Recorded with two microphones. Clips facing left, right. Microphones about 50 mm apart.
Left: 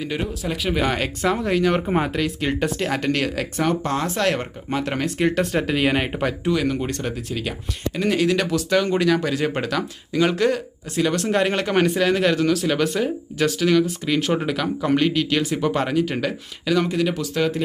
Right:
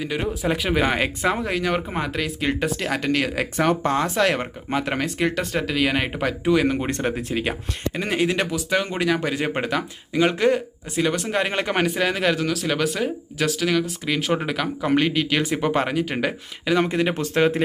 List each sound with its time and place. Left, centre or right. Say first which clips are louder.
0.0 s speech: even; centre
0.3 s speech: right 2 dB; centre
6.1 s speech: right 2 dB; centre
11.0 s speech: left 3 dB; centre
16.8 s speech: even; right